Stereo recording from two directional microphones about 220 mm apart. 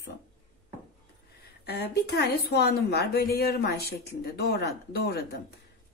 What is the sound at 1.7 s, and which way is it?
A woman's voice, 45° left (ahead or behind).